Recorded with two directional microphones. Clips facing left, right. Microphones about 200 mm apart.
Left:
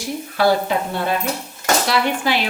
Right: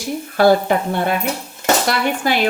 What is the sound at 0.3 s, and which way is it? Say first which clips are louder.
A woman's voice: right 4 dB; 55° right (ahead or behind).